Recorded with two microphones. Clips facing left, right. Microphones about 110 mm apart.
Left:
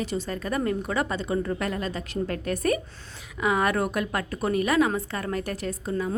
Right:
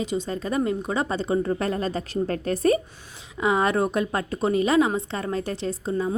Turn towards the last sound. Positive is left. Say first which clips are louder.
# right 3 dB
turn(degrees=-30)  # may be behind; listen again after turning